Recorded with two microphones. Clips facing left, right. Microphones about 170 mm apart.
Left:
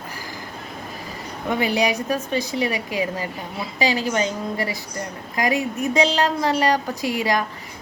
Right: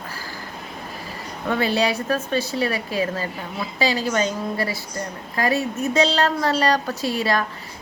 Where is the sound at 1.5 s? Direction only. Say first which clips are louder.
Even; 15° left (ahead or behind).